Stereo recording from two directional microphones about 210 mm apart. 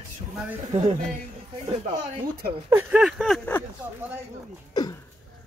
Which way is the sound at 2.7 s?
10° right (ahead or behind).